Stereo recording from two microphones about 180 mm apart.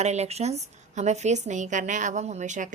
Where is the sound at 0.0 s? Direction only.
40° right (ahead or behind).